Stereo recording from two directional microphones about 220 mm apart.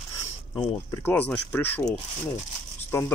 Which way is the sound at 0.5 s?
25° left (ahead or behind).